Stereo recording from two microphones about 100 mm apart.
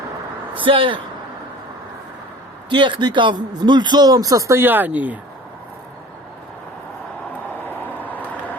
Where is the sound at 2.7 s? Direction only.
55° right (ahead or behind); by 4.6 s 35° right (ahead or behind).